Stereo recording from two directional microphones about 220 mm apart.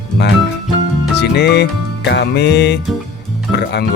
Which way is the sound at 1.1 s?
50° left (ahead or behind).